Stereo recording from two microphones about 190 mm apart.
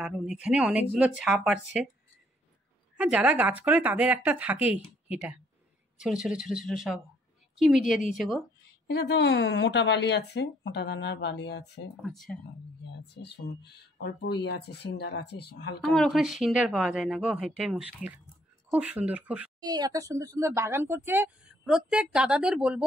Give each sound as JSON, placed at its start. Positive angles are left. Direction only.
{"t": 0.0, "sound": "speech", "side_deg": -5}
{"t": 3.0, "sound": "speech", "side_deg": -5}
{"t": 5.9, "sound": "speech", "side_deg": 0}
{"t": 8.8, "sound": "speech", "side_deg": 60}
{"t": 12.0, "sound": "speech", "side_deg": 0}
{"t": 13.0, "sound": "speech", "side_deg": 60}
{"t": 15.8, "sound": "speech", "side_deg": 0}
{"t": 19.6, "sound": "speech", "side_deg": -20}